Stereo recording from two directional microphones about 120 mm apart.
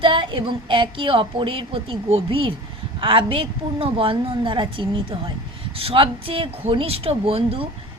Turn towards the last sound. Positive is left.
turn(degrees=-50)  # may be behind; listen again after turning